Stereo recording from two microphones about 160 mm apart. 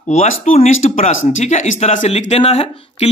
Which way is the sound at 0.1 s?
45° left (ahead or behind).